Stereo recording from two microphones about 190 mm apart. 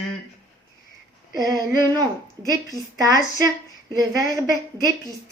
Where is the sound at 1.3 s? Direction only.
20° right (ahead or behind).